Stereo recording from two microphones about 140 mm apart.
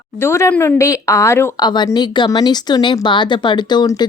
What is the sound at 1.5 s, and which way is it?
A woman's voice, 30° left (ahead or behind).